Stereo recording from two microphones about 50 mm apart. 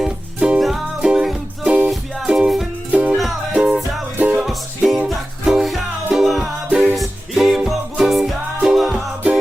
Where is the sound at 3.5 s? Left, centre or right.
Centre.